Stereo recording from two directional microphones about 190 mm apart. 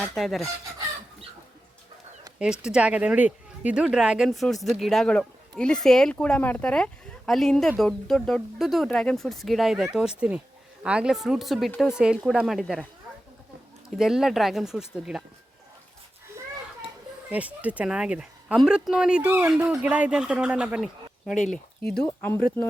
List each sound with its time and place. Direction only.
0.0 s speech: centre (ahead or behind)
2.4 s speech: 5° right (ahead or behind)
14.0 s speech: centre (ahead or behind)
17.3 s speech: 5° right (ahead or behind)